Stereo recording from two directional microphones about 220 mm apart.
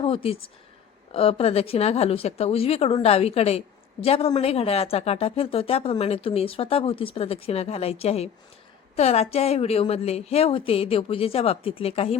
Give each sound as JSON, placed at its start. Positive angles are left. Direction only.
{"t": 0.0, "sound": "a woman's voice", "side_deg": 25}